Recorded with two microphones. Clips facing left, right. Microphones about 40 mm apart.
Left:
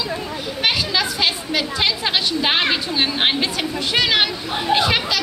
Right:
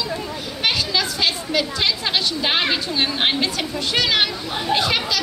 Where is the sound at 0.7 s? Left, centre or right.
Centre.